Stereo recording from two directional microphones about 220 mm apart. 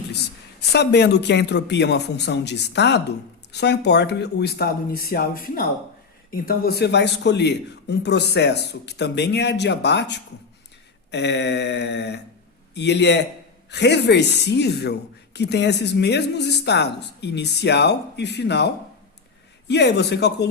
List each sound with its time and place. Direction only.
0.7 s speech: 50° left (ahead or behind)